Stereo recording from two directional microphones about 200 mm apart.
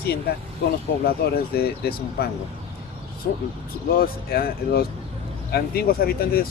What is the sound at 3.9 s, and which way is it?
Speech, 45° left (ahead or behind).